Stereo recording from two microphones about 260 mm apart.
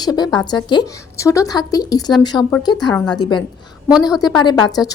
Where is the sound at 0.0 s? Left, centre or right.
Centre.